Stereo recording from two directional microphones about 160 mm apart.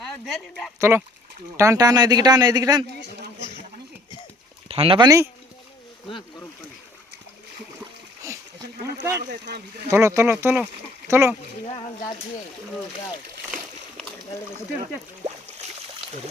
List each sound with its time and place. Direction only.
0.1 s speech: centre (ahead or behind)
0.8 s speech: 15° right (ahead or behind)
4.7 s speech: 35° right (ahead or behind)
5.0 s speech: 20° right (ahead or behind)
8.2 s splash: 20° right (ahead or behind)
9.0 s speech: 20° right (ahead or behind)